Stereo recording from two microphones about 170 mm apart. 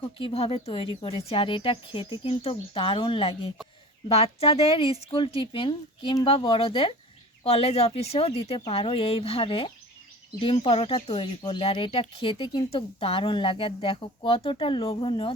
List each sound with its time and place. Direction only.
0.2 s speech: 35° left (ahead or behind)